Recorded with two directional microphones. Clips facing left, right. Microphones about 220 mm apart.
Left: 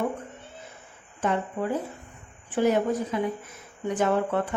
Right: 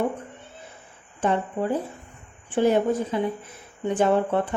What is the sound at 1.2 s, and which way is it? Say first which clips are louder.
A woman's voice: right 3 dB; 30° right (ahead or behind).